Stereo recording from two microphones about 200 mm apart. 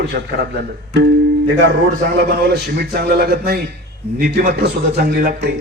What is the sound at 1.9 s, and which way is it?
A man's voice, 50° right (ahead or behind).